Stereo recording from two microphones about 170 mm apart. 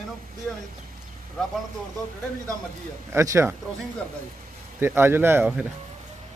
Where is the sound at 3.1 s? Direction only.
15° right (ahead or behind).